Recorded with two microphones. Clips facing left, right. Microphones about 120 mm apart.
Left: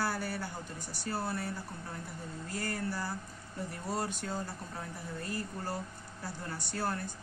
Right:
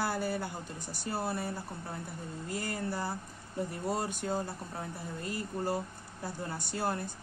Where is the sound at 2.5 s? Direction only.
15° right (ahead or behind).